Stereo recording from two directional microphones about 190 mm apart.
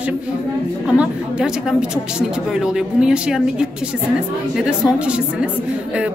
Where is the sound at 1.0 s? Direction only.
5° right (ahead or behind).